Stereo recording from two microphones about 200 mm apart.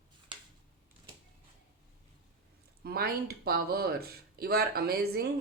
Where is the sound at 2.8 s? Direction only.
50° right (ahead or behind).